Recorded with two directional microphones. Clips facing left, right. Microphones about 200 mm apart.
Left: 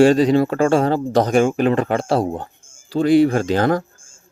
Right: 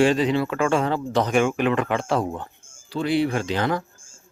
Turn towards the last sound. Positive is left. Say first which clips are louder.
# left 6 dB
turn(degrees=45)  # may be behind; listen again after turning